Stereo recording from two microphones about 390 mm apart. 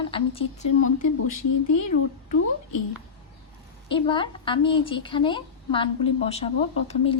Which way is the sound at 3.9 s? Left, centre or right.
Centre.